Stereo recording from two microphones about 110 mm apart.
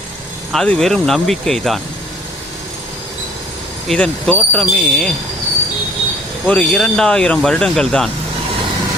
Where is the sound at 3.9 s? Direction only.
5° left (ahead or behind).